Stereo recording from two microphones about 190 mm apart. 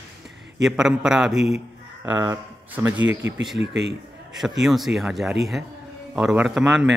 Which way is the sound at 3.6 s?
65° right (ahead or behind).